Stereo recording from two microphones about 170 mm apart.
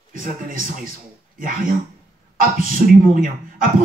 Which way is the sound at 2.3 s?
55° right (ahead or behind).